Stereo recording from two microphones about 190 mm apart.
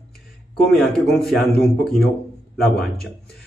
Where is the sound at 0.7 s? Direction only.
Centre (ahead or behind).